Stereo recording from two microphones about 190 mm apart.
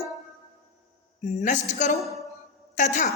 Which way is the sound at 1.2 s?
40° left (ahead or behind).